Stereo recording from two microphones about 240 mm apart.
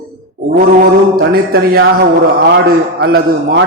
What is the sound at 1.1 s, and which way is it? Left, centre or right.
A man's voice, right.